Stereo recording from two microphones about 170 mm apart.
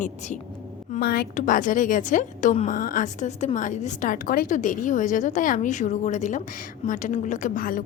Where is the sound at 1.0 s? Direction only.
60° left (ahead or behind).